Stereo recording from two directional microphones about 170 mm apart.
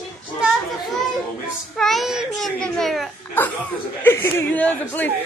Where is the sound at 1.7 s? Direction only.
Centre (ahead or behind).